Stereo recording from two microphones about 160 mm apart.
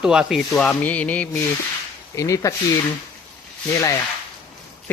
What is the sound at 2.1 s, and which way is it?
Speech, 20° left (ahead or behind).